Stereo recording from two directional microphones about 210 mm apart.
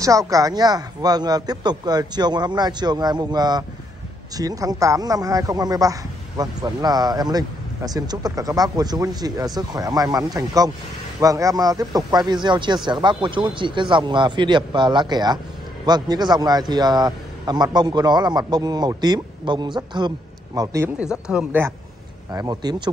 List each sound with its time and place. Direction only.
0.0 s a man's voice: 15° right (ahead or behind)